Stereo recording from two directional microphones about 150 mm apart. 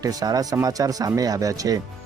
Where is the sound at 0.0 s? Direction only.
25° right (ahead or behind).